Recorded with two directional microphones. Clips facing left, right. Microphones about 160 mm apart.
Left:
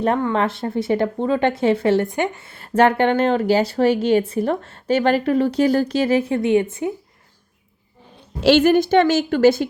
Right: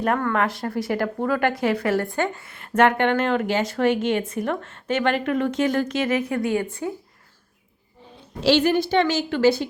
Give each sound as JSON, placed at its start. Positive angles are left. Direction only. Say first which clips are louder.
{"t": 0.3, "sound": "a woman's voice", "louder": "left 3 dB", "side_deg": 25}
{"t": 8.4, "sound": "a woman's voice", "louder": "left 5 dB", "side_deg": 50}